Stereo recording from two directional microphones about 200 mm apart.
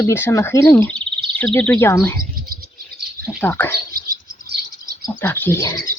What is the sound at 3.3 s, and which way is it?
Speech, 10° left (ahead or behind).